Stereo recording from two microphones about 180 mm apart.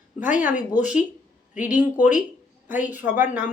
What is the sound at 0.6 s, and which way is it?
Speech, 45° left (ahead or behind).